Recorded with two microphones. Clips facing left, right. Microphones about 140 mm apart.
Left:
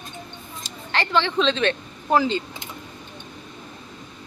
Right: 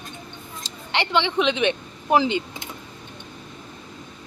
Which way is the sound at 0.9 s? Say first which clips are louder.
Even; 20° right (ahead or behind).